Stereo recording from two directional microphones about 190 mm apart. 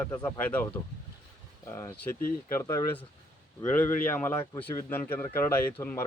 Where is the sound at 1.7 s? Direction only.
15° left (ahead or behind).